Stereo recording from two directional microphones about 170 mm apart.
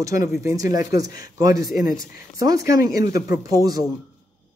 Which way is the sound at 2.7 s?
20° right (ahead or behind).